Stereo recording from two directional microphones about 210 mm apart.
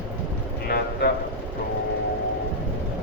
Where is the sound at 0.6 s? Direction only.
50° left (ahead or behind).